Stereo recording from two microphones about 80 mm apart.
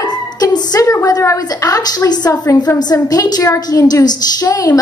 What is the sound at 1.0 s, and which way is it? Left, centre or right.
A woman's voice, left.